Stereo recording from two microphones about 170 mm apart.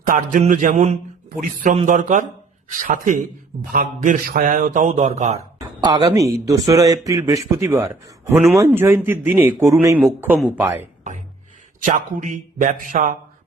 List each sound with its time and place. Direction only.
0.0 s a man's voice: 50° right (ahead or behind)
5.5 s speech: 20° right (ahead or behind)
11.9 s a man's voice: 50° right (ahead or behind)